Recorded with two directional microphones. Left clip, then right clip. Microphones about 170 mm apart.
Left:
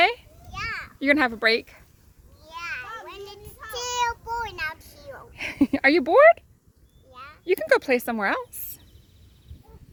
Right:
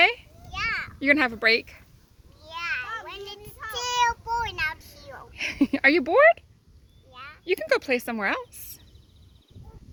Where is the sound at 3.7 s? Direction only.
Centre (ahead or behind).